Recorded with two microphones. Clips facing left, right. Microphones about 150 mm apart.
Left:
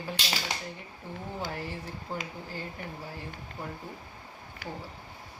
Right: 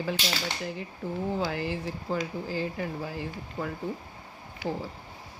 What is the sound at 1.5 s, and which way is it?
Speech, 90° right.